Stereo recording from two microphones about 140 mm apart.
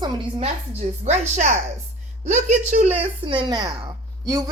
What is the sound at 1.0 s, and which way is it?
Speech, 55° right (ahead or behind).